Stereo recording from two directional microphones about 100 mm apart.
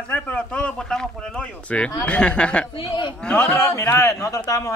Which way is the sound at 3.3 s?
25° left (ahead or behind).